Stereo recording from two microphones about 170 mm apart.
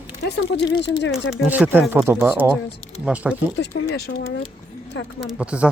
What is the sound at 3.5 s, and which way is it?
Speech, 70° left (ahead or behind).